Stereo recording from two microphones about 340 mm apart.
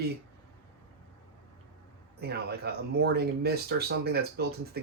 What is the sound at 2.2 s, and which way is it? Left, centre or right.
Speech, right.